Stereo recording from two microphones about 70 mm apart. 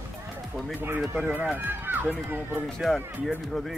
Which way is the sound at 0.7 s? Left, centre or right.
Right.